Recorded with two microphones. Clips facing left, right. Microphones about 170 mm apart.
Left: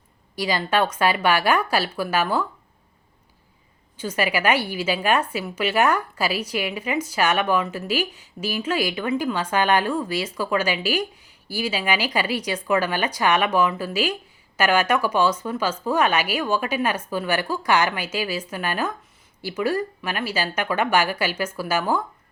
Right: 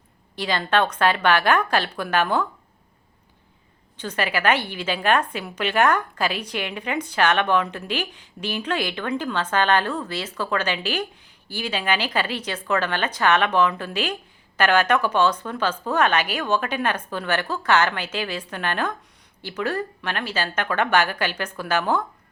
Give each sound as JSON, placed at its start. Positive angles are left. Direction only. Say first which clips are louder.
{"t": 0.3, "sound": "a woman's voice", "louder": "even", "side_deg": 10}
{"t": 3.9, "sound": "a woman's voice", "louder": "left 2 dB", "side_deg": 10}